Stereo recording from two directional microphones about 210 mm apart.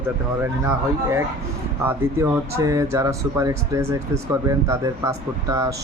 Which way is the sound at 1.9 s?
15° right (ahead or behind).